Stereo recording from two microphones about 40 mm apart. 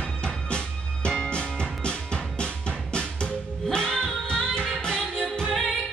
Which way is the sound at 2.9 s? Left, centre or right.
Left.